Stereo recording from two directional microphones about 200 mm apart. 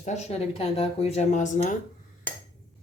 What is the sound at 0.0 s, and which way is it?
Speech, 35° left (ahead or behind).